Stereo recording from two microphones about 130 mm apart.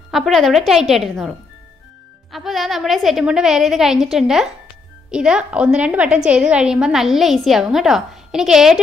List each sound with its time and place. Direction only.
0.1 s a woman's voice: centre (ahead or behind)
2.3 s a woman's voice: centre (ahead or behind)